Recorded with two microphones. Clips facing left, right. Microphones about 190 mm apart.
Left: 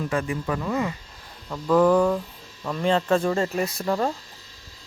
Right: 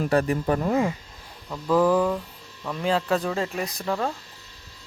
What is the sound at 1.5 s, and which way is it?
Speech, 5° right (ahead or behind).